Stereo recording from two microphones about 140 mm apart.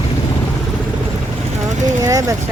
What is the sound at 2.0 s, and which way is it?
Speech, 20° right (ahead or behind).